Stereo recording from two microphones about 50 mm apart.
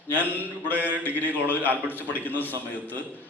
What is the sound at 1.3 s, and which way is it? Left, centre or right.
Speech, right.